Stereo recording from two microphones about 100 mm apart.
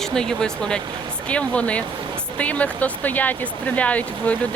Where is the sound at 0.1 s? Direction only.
5° left (ahead or behind).